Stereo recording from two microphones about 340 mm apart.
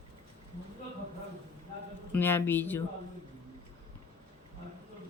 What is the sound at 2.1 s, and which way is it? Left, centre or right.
Speech, centre.